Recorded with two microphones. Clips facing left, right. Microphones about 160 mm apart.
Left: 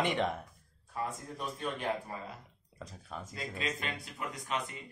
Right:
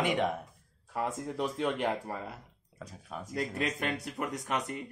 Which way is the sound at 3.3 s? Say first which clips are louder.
Right 6 dB; 60° right (ahead or behind).